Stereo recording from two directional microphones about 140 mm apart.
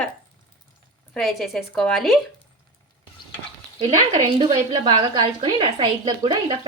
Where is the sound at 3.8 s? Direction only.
35° right (ahead or behind).